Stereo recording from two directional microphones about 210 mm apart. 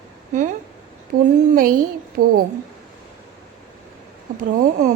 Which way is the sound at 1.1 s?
90° right.